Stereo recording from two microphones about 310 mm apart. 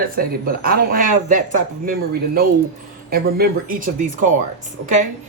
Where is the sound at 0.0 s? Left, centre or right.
Right.